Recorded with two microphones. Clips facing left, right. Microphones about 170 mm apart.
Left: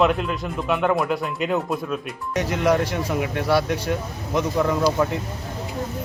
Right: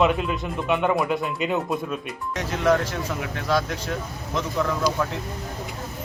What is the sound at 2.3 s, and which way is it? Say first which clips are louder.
Speech: left 2 dB; 15° left (ahead or behind).